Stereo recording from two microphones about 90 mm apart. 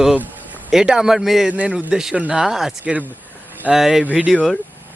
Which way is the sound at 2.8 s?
15° right (ahead or behind).